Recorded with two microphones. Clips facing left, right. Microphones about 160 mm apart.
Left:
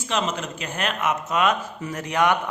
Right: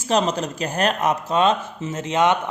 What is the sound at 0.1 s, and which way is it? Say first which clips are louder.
Speech: right 6 dB; 35° right (ahead or behind).